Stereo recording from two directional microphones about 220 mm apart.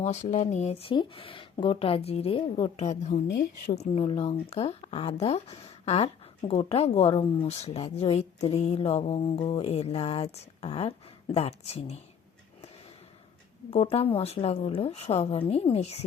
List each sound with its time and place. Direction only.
0.0 s speech: 30° left (ahead or behind)
3.2 s a woman's voice: 50° left (ahead or behind)
3.8 s speech: 25° left (ahead or behind)
13.7 s speech: 25° left (ahead or behind)